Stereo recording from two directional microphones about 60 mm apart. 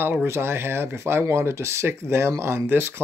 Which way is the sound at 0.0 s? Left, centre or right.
Right.